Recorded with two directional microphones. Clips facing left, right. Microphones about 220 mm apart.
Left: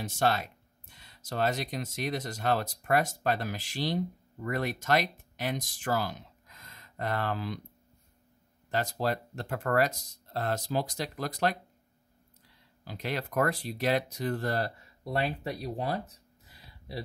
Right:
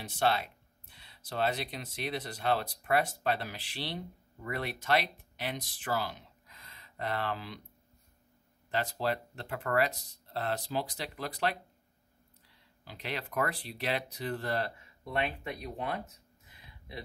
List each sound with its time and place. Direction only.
0.0 s speech: 45° left (ahead or behind)
8.6 s speech: 45° left (ahead or behind)
12.8 s speech: 45° left (ahead or behind)
16.4 s a sound: 35° left (ahead or behind)